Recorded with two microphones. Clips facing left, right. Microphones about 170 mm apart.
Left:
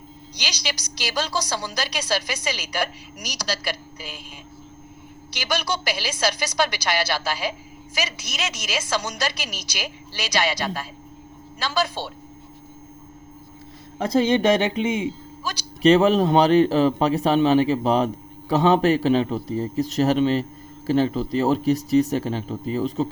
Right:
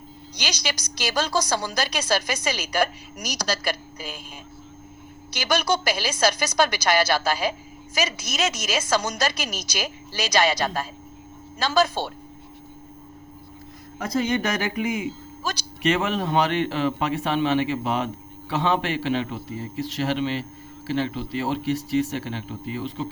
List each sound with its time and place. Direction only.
0.3 s a woman's voice: 50° right (ahead or behind)
5.3 s a woman's voice: 45° right (ahead or behind)
14.0 s a man's voice: 30° left (ahead or behind)